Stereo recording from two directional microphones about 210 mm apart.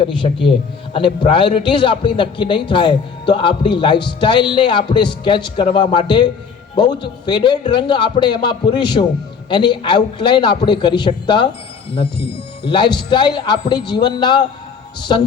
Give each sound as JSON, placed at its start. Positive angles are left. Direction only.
{"t": 0.0, "sound": "a man's voice", "side_deg": 25}
{"t": 12.6, "sound": "a man's voice", "side_deg": 20}